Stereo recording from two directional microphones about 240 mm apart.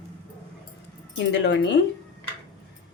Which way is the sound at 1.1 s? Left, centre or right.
Left.